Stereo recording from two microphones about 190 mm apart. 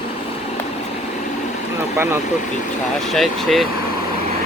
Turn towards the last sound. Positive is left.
turn(degrees=0)  # may be behind; listen again after turning